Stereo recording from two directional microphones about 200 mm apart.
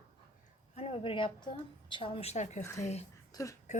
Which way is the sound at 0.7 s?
30° left (ahead or behind).